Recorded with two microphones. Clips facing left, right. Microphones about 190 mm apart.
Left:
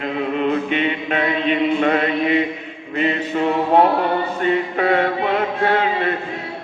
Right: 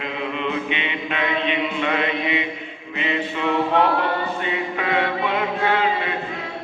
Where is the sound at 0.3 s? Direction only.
45° left (ahead or behind).